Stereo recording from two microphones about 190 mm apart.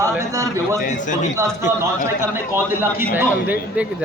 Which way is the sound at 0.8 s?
40° left (ahead or behind).